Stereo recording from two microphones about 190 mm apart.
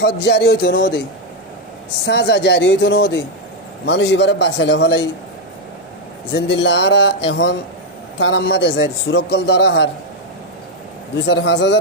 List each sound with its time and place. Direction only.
0.0 s a man's voice: 65° left (ahead or behind)
2.0 s a man's voice: 65° left (ahead or behind)
6.3 s a man's voice: 65° left (ahead or behind)
11.2 s a man's voice: 65° left (ahead or behind)